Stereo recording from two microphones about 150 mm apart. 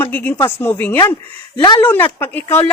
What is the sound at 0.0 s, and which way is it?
Speech, 10° left (ahead or behind).